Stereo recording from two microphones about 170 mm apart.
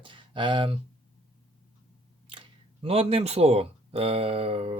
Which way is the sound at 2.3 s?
30° right (ahead or behind).